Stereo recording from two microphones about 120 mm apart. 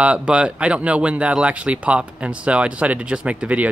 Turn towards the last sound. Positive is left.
turn(degrees=-10)  # may be behind; listen again after turning